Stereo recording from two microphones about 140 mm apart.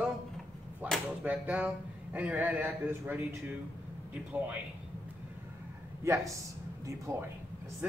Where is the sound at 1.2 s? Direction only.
10° right (ahead or behind).